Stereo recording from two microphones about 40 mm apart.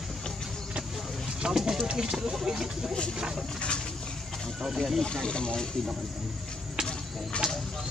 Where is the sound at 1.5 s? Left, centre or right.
Centre.